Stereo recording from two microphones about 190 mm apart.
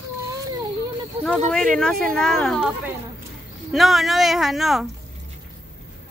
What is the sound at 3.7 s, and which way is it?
Speech, centre (ahead or behind).